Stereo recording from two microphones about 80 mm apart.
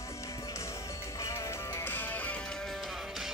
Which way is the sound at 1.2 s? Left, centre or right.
Left.